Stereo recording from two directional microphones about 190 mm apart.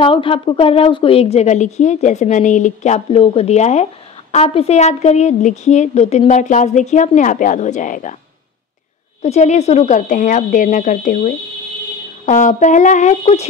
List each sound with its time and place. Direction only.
0.0 s a woman's voice: 25° left (ahead or behind)
9.2 s a woman's voice: 35° left (ahead or behind)